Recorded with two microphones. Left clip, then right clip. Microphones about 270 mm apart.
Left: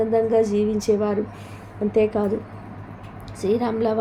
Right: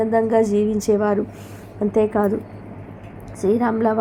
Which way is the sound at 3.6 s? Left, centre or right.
Centre.